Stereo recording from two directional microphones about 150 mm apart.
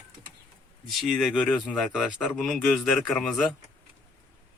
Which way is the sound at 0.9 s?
Centre (ahead or behind).